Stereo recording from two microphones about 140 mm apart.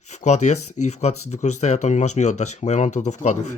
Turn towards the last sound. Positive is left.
turn(degrees=60)  # may be behind; listen again after turning